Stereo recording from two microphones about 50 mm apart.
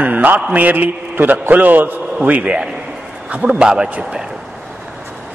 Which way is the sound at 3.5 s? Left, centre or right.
Centre.